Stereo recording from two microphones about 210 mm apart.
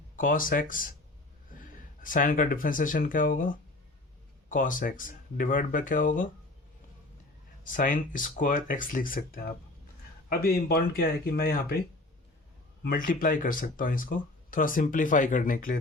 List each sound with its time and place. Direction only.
0.2 s speech: 40° left (ahead or behind)
7.6 s speech: 40° left (ahead or behind)
12.8 s speech: 45° left (ahead or behind)